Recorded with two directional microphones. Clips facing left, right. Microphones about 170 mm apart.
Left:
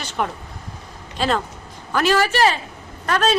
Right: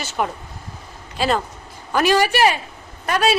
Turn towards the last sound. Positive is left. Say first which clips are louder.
# even
turn(degrees=-10)  # may be behind; listen again after turning